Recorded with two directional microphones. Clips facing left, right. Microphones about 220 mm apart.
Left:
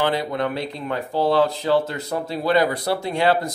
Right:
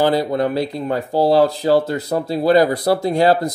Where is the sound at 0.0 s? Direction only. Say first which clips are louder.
Right 6 dB; 35° right (ahead or behind).